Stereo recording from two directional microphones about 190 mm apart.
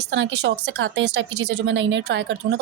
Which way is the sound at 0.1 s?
75° right (ahead or behind).